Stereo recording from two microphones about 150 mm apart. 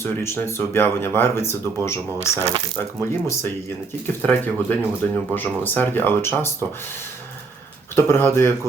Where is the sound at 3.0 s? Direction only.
15° left (ahead or behind).